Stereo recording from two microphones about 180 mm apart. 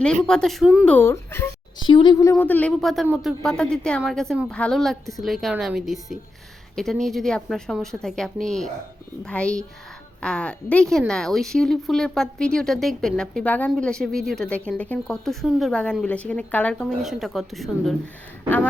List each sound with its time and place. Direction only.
0.0 s a woman's voice: 5° left (ahead or behind)
0.9 s speech: 15° left (ahead or behind)
1.8 s speech: 25° left (ahead or behind)
2.3 s a woman's voice: 10° left (ahead or behind)